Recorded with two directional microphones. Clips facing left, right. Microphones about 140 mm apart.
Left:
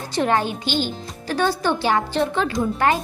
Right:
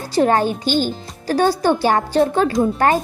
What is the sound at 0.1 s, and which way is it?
Speech, 40° right (ahead or behind).